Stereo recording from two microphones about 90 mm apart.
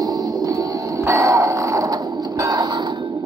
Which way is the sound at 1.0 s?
35° right (ahead or behind).